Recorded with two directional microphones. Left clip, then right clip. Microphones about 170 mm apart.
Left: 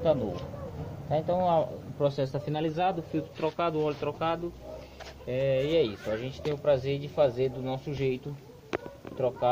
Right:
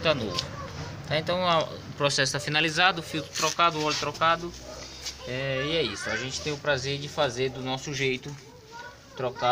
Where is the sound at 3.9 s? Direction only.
40° left (ahead or behind).